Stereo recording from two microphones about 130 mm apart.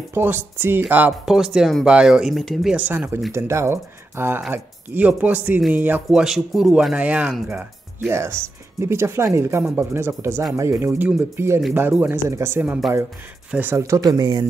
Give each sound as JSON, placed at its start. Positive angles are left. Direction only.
{"t": 0.1, "sound": "speech", "side_deg": -15}
{"t": 8.1, "sound": "speech", "side_deg": -20}